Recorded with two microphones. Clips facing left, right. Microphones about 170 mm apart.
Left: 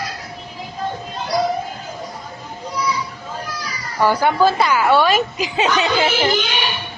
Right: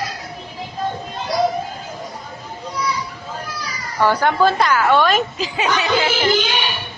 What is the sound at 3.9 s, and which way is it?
A woman's voice, 10° left (ahead or behind).